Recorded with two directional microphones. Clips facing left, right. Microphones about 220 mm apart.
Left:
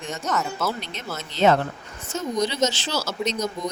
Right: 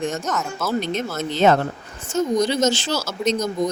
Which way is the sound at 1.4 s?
45° right (ahead or behind).